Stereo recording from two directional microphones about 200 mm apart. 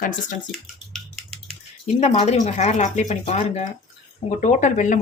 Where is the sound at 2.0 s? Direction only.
35° left (ahead or behind).